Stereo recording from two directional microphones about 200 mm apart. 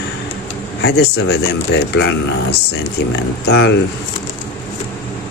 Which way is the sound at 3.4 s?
55° left (ahead or behind).